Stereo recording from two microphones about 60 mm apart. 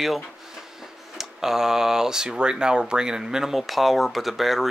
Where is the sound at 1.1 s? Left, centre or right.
Centre.